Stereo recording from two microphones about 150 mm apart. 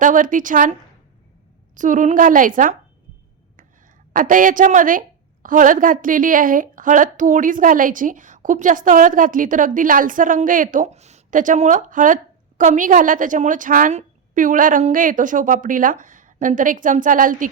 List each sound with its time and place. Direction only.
0.0 s a woman's voice: 60° right (ahead or behind)
4.1 s a woman's voice: 65° right (ahead or behind)